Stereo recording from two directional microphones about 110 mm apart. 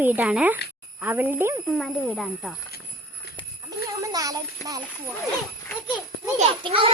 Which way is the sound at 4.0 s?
35° right (ahead or behind).